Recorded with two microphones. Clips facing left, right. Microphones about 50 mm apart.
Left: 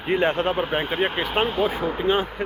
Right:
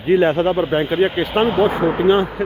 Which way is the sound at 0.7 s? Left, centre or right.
Centre.